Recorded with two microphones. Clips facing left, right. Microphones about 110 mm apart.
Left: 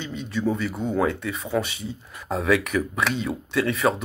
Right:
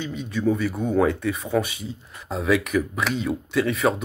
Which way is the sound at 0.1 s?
20° left (ahead or behind).